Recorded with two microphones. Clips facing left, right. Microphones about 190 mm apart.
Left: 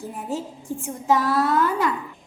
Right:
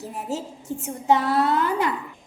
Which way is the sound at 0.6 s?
25° right (ahead or behind).